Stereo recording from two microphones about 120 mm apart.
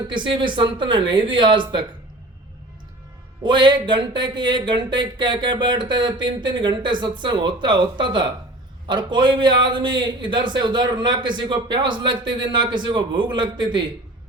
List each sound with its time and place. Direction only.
0.1 s speech: 40° right (ahead or behind)
3.4 s a man's voice: 40° right (ahead or behind)